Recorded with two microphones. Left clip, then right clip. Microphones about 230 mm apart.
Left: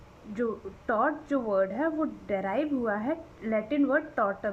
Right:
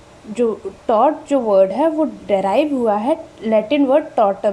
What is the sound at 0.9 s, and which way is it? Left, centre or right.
A woman's voice, centre.